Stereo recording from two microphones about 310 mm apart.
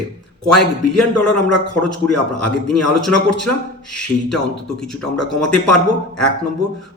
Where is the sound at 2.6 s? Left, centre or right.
Centre.